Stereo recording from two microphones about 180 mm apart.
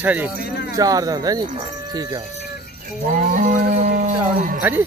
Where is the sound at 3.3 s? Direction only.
50° right (ahead or behind).